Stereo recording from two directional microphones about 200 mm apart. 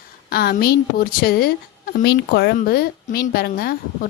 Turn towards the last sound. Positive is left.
turn(degrees=50)  # may be behind; listen again after turning